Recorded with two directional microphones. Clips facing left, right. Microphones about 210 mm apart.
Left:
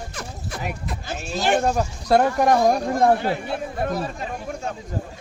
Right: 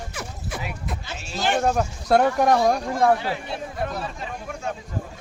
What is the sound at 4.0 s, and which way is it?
Speech, 45° left (ahead or behind).